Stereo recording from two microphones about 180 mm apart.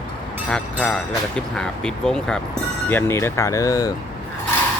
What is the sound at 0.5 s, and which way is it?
Speech, 5° left (ahead or behind).